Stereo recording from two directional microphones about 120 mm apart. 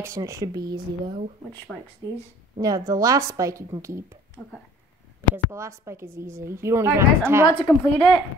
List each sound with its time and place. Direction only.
0.0 s speech: 25° right (ahead or behind)
2.6 s speech: 30° right (ahead or behind)
5.3 s speech: 25° right (ahead or behind)
7.4 s a woman's voice: 40° left (ahead or behind)